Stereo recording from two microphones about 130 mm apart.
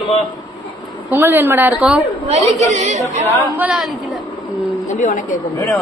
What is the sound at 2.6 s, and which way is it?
Speech, 60° right (ahead or behind).